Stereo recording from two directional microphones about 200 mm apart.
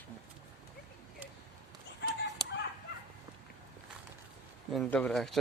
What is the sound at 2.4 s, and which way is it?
Fowl, 20° right (ahead or behind).